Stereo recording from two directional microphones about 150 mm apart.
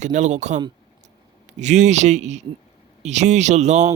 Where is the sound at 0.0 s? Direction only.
50° right (ahead or behind).